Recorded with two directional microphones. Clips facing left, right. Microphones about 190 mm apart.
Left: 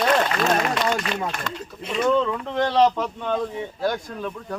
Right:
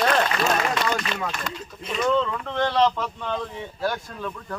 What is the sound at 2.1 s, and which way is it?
Speech, 15° left (ahead or behind).